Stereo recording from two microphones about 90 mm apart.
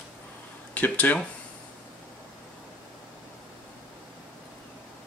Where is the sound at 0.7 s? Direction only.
20° left (ahead or behind).